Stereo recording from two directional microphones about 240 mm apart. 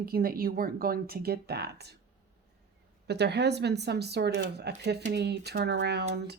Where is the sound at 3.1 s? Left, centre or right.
Right.